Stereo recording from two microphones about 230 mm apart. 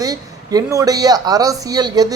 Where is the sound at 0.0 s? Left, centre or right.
Centre.